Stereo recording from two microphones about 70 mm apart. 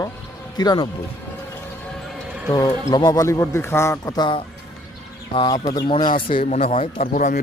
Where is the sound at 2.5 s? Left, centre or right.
Left.